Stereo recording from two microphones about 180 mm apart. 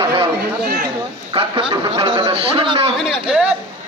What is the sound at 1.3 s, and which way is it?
A man's voice, 30° right (ahead or behind).